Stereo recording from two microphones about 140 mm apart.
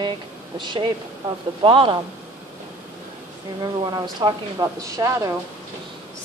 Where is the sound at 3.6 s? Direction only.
30° right (ahead or behind).